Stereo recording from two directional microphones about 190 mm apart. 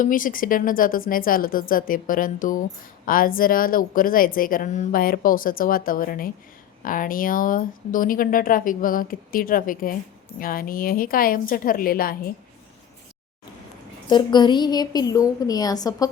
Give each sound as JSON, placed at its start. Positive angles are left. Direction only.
{"t": 0.0, "sound": "a woman's voice", "side_deg": 45}
{"t": 14.1, "sound": "a woman's voice", "side_deg": 25}